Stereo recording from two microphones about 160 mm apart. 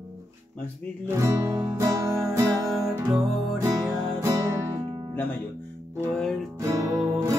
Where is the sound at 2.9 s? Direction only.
25° right (ahead or behind).